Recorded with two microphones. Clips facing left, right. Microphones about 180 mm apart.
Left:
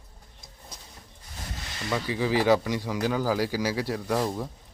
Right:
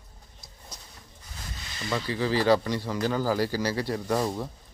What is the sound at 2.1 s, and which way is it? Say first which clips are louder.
Speech: even; 15° left (ahead or behind).